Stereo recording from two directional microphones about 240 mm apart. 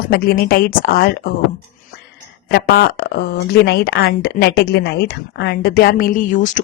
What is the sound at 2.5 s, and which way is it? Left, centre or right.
Speech, left.